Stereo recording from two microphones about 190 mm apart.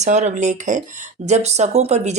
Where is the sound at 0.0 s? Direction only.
35° right (ahead or behind).